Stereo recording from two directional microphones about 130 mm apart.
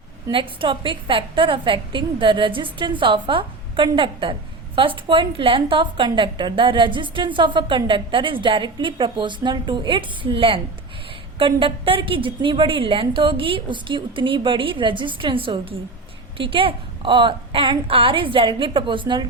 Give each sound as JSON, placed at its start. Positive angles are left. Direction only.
{"t": 0.3, "sound": "a woman's voice", "side_deg": -40}